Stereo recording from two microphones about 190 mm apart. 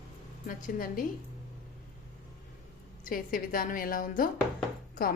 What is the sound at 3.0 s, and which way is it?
A woman's voice, 45° left (ahead or behind).